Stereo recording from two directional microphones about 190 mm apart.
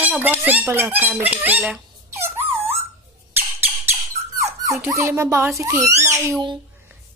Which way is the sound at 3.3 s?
10° right (ahead or behind).